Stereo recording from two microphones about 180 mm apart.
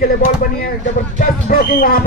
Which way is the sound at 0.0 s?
55° left (ahead or behind).